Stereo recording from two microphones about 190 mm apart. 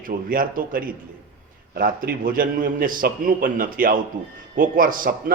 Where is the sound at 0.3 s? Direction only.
50° right (ahead or behind).